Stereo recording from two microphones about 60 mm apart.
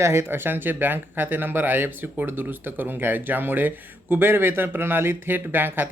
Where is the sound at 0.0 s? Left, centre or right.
Right.